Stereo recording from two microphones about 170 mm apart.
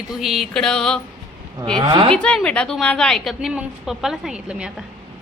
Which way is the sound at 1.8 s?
30° right (ahead or behind).